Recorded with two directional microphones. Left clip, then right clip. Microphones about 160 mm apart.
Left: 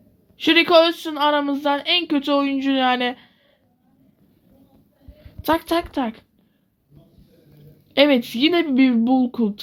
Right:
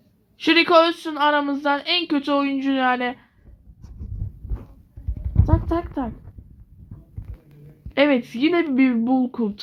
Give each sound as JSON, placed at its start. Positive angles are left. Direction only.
{"t": 0.3, "sound": "speech", "side_deg": 20}
{"t": 5.5, "sound": "speech", "side_deg": 30}
{"t": 7.9, "sound": "speech", "side_deg": 25}